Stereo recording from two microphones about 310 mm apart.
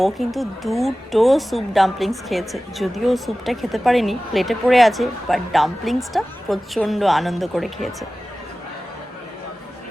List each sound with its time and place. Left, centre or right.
0.0 s speech: centre